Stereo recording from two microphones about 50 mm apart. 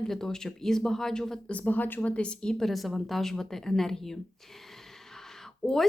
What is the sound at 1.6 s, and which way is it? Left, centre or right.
Speech, left.